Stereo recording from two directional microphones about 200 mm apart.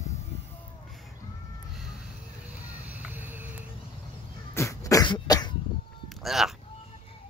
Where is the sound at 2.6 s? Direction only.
10° right (ahead or behind).